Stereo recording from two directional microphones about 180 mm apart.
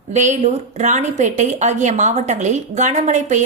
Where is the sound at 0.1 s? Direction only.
40° right (ahead or behind).